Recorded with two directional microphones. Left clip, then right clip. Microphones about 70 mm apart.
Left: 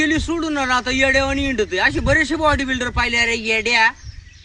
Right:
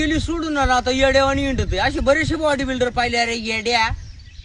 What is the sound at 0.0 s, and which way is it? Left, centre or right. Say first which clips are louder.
A man's voice: left 2 dB; right.